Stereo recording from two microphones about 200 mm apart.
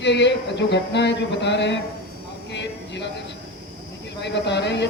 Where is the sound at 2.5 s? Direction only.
60° left (ahead or behind).